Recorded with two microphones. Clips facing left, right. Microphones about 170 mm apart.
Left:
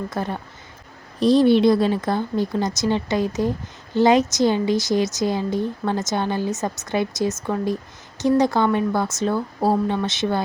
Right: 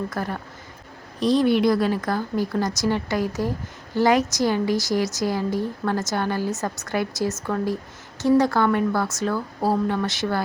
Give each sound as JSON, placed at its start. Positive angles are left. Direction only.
{"t": 0.1, "sound": "a woman's voice", "side_deg": 25}